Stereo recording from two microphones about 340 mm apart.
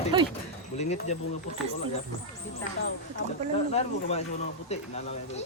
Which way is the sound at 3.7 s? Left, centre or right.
Centre.